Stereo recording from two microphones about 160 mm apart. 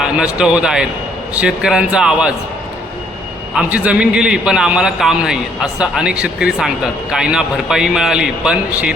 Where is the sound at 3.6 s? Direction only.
10° right (ahead or behind).